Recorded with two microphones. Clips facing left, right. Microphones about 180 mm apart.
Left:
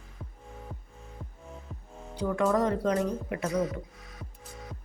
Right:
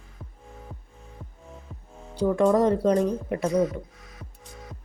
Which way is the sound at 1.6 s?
Centre (ahead or behind).